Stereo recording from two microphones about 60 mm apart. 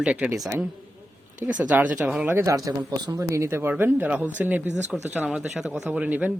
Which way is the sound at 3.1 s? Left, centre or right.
Right.